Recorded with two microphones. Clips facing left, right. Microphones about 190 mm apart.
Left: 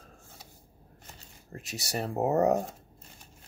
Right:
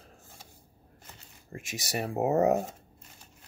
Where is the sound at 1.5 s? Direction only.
10° right (ahead or behind).